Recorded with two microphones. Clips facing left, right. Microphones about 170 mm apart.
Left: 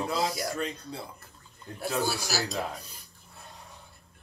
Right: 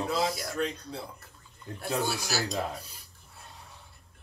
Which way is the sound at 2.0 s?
5° left (ahead or behind).